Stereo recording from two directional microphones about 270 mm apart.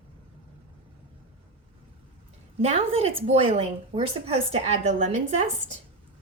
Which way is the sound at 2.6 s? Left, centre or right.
Right.